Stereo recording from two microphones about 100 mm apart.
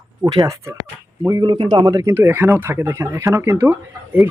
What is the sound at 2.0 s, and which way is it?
Speech, 25° right (ahead or behind).